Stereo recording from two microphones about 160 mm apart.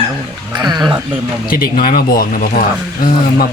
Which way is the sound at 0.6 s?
25° right (ahead or behind).